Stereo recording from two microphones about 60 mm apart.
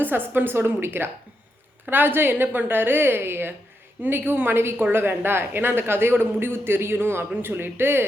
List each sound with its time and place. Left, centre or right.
0.0 s speech: right